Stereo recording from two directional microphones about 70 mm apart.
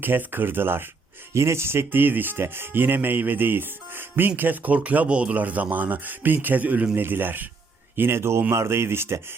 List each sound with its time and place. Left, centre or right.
0.0 s speech: right
1.3 s speech: right